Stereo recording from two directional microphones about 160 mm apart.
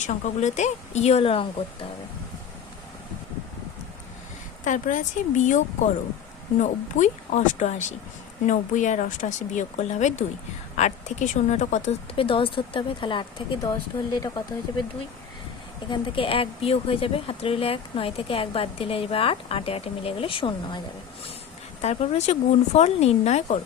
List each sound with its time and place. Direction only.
0.0 s speech: 50° left (ahead or behind)
4.6 s speech: 50° left (ahead or behind)
12.1 s speech: 35° left (ahead or behind)
15.9 s speech: 35° left (ahead or behind)